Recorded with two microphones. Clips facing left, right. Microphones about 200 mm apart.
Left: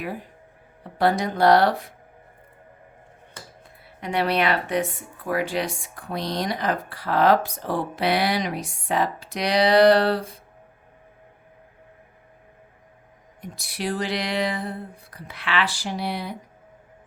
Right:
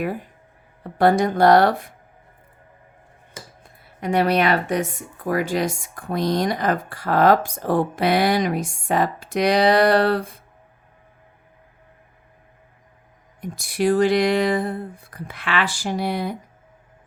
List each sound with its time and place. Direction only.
0.9 s speech: 50° right (ahead or behind)
3.6 s speech: 45° right (ahead or behind)
13.4 s speech: 50° right (ahead or behind)